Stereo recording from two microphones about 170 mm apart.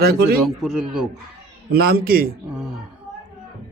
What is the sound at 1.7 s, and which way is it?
Speech, 65° right (ahead or behind).